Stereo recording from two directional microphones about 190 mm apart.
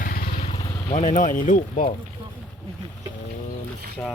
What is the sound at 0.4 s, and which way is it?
Vehicle, 30° left (ahead or behind).